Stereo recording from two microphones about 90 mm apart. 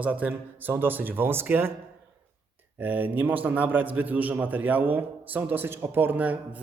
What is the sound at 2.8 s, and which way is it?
A man's voice, 20° right (ahead or behind).